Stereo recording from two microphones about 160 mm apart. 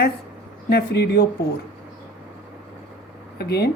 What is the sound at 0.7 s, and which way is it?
Speech, 85° left.